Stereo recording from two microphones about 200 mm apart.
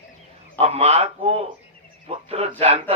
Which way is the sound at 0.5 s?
30° right (ahead or behind).